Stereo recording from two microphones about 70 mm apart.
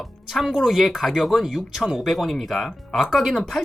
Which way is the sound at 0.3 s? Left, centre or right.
Centre.